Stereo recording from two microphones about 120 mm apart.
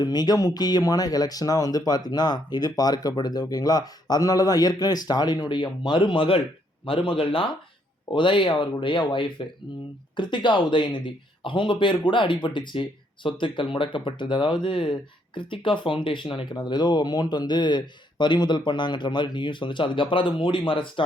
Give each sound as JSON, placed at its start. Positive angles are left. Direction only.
{"t": 0.0, "sound": "speech", "side_deg": 35}